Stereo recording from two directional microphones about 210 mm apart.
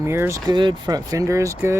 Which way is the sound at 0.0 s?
15° right (ahead or behind).